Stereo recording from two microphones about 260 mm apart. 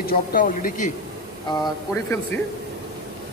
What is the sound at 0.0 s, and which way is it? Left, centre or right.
Speech, left.